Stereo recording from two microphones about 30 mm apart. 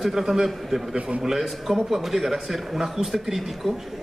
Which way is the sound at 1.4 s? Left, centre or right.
Centre.